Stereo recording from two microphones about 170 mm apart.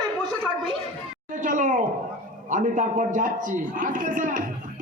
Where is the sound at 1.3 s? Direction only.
50° right (ahead or behind).